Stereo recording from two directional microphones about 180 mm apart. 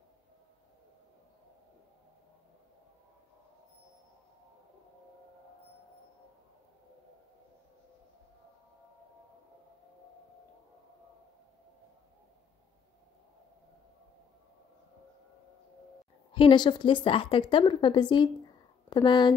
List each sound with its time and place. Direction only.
16.3 s a woman's voice: 25° left (ahead or behind)